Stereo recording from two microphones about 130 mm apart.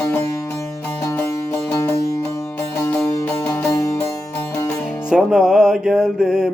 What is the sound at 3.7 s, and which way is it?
Music, 25° left (ahead or behind).